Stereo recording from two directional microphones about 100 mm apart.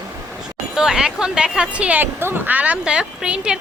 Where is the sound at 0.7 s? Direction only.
5° right (ahead or behind).